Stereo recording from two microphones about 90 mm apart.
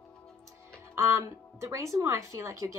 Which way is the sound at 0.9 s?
35° right (ahead or behind).